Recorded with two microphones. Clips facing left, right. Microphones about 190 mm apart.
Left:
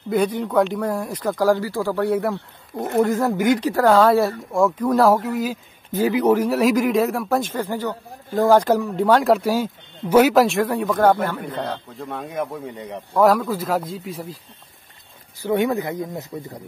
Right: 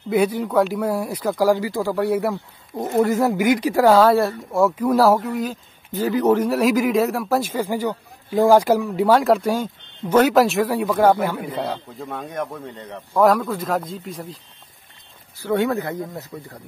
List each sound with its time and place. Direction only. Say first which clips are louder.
0.1 s speech: right 1 dB; 5° right (ahead or behind); by 13.0 s 10° left (ahead or behind)
13.1 s speech: even; centre (ahead or behind)
15.4 s speech: even; 15° left (ahead or behind)